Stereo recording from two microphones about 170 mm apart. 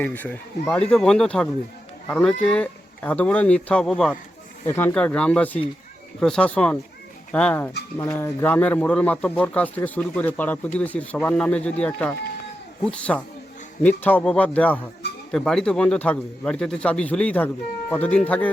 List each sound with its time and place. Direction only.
0.0 s speech: 10° left (ahead or behind)
4.6 s a man's voice: 15° left (ahead or behind)